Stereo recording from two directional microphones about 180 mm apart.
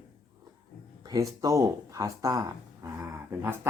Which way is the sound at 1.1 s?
20° right (ahead or behind).